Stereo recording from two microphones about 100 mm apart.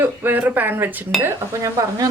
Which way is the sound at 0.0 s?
20° right (ahead or behind).